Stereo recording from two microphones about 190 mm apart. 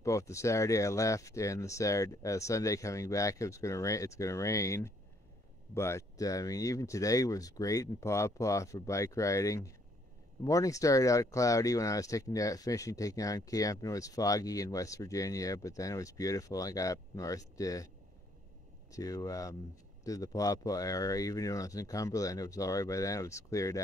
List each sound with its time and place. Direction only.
0.0 s speech: 15° left (ahead or behind)
18.9 s speech: 20° left (ahead or behind)